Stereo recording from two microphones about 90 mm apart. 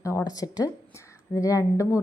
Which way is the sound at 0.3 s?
45° left (ahead or behind).